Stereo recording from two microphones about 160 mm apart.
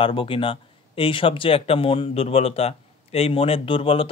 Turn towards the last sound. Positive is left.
turn(degrees=35)  # may be behind; listen again after turning